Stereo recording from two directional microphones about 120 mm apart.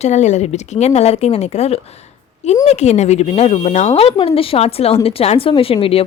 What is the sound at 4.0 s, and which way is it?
A woman's voice, 55° left (ahead or behind).